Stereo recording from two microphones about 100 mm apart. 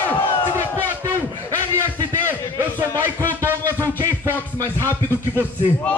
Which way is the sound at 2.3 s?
25° right (ahead or behind).